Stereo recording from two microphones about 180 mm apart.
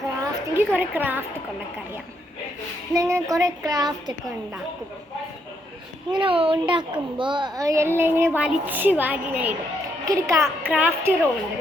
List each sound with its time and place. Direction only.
0.5 s a child's voice: 10° right (ahead or behind)
2.9 s child singing: 15° right (ahead or behind)
6.1 s a child's voice: 30° right (ahead or behind); by 11.3 s 10° right (ahead or behind)